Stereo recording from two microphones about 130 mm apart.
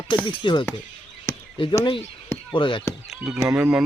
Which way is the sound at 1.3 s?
20° left (ahead or behind).